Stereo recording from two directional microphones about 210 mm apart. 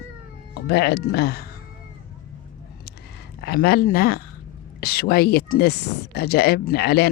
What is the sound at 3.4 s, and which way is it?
Speech, 50° left (ahead or behind).